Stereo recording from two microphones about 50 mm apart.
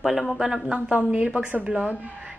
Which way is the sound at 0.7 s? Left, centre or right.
Right.